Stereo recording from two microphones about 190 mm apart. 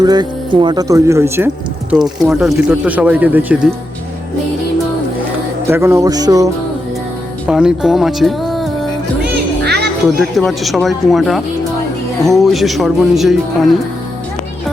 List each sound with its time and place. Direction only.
0.0 s speech: 20° right (ahead or behind)
1.9 s speech: 5° right (ahead or behind)
5.6 s speech: 15° right (ahead or behind)
7.4 s speech: 5° right (ahead or behind)
9.3 s music: 60° right (ahead or behind)
10.2 s speech: centre (ahead or behind)